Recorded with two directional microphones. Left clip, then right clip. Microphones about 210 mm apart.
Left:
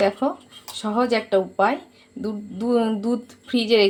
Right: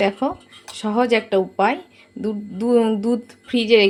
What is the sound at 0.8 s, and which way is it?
A woman's voice, 20° right (ahead or behind).